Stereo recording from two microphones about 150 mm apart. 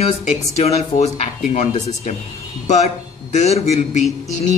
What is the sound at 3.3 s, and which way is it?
Speech, 45° left (ahead or behind).